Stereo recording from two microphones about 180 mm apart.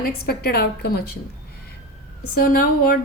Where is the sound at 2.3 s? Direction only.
55° left (ahead or behind).